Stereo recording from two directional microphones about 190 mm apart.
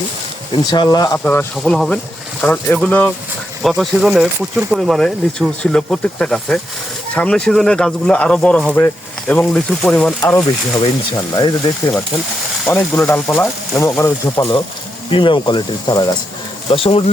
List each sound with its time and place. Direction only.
0.5 s speech: 25° left (ahead or behind)
1.2 s speech: 10° left (ahead or behind)
11.3 s speech: 25° left (ahead or behind)
12.6 s speech: 10° left (ahead or behind)
15.1 s speech: 25° left (ahead or behind)